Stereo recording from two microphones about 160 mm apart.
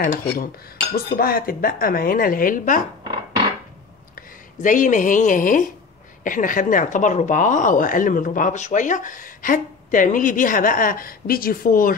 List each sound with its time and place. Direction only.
0.0 s a woman's voice: 60° left (ahead or behind)
4.1 s a woman's voice: 55° left (ahead or behind)